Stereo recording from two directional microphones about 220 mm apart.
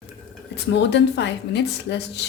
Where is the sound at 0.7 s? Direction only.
55° left (ahead or behind).